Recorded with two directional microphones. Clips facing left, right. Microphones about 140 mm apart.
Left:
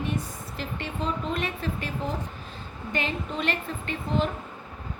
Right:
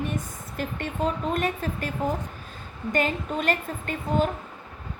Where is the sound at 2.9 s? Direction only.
45° right (ahead or behind).